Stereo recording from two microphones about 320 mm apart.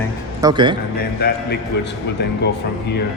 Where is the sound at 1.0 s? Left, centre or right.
Left.